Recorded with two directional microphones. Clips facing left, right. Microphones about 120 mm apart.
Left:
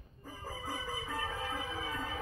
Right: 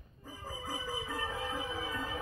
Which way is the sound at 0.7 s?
15° right (ahead or behind).